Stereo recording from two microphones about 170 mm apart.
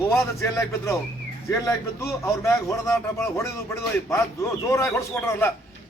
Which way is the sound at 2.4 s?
15° left (ahead or behind).